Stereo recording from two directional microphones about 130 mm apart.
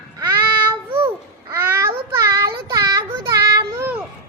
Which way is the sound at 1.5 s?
15° right (ahead or behind).